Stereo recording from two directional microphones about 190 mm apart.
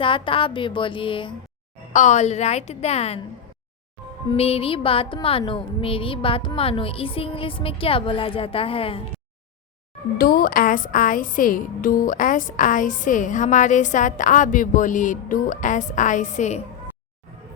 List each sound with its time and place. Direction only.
0.0 s music: 25° left (ahead or behind)
1.9 s a woman's voice: 40° left (ahead or behind)
4.3 s music: 30° left (ahead or behind)
10.2 s music: 50° left (ahead or behind)